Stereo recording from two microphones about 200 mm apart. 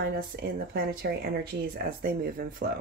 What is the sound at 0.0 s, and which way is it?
Speech, 50° right (ahead or behind).